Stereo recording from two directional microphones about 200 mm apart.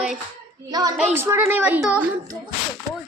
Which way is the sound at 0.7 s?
20° right (ahead or behind).